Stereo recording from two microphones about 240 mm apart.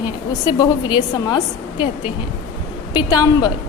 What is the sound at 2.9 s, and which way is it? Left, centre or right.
Speech, centre.